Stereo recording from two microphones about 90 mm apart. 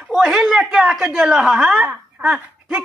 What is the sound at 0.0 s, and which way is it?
A woman's voice, 5° right (ahead or behind).